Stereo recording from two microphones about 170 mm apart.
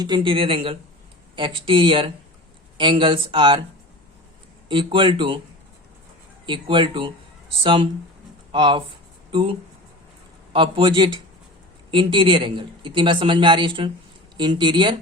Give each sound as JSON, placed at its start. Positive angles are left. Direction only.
{"t": 0.0, "sound": "speech", "side_deg": -25}
{"t": 4.7, "sound": "speech", "side_deg": -30}
{"t": 6.4, "sound": "speech", "side_deg": -30}